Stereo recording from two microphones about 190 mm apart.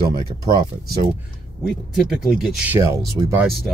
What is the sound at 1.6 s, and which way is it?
Speech, centre (ahead or behind).